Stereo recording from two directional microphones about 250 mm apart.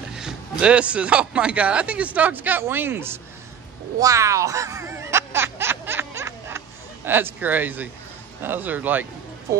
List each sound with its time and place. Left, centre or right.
0.1 s speech: centre
4.0 s a sound: centre
7.1 s speech: centre